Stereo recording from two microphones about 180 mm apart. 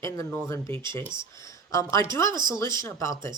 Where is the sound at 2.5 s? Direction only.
15° left (ahead or behind).